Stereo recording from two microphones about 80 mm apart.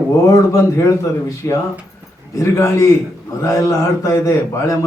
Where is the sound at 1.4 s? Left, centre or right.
Left.